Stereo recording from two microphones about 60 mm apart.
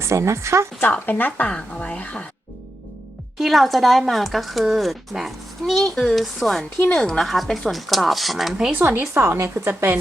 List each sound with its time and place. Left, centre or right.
0.0 s speech: right
1.0 s speech: left
1.5 s speech: centre
3.3 s speech: centre
8.7 s speech: right
9.1 s speech: right